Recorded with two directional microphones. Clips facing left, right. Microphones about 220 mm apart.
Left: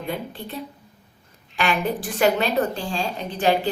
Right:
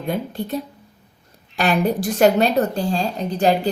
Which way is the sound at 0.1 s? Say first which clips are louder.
Right 8 dB; 45° right (ahead or behind).